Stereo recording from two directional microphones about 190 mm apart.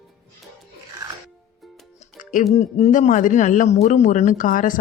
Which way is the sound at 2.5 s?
35° left (ahead or behind).